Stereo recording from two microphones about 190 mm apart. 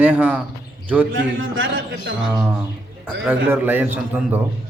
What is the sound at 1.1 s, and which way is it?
Speech, 85° right.